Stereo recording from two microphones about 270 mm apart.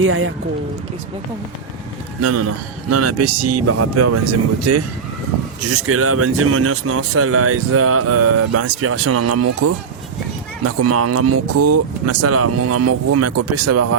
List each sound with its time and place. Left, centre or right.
0.0 s speech: right
2.2 s speech: right